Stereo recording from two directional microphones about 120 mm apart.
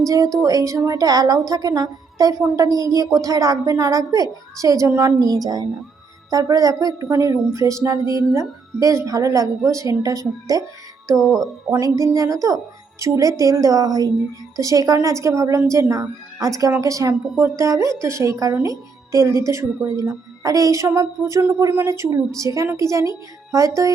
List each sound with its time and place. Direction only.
0.0 s a woman's voice: 25° right (ahead or behind)